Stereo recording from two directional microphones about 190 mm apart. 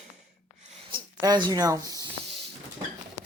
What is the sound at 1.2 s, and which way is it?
Speech, 20° right (ahead or behind).